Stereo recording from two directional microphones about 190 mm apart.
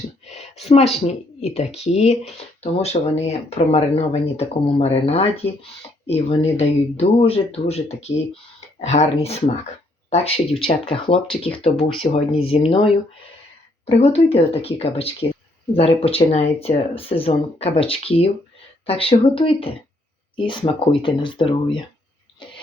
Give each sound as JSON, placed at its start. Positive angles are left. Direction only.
{"t": 0.3, "sound": "a sound", "side_deg": 35}
{"t": 1.0, "sound": "speech", "side_deg": 35}
{"t": 10.1, "sound": "speech", "side_deg": 35}